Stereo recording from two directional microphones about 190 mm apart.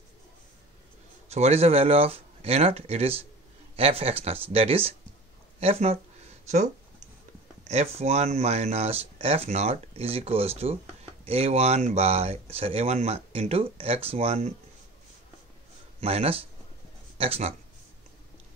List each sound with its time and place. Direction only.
1.3 s speech: 35° right (ahead or behind)
7.6 s speech: 35° right (ahead or behind)
16.0 s speech: 30° right (ahead or behind)